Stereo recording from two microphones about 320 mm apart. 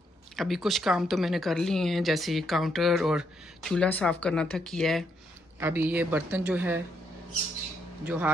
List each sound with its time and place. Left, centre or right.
0.4 s speech: centre
8.0 s speech: centre